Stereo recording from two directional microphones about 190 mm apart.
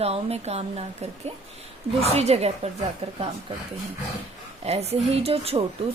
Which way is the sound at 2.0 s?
35° right (ahead or behind).